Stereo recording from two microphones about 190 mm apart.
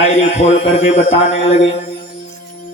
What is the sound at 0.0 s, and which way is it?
A man's voice, 35° left (ahead or behind).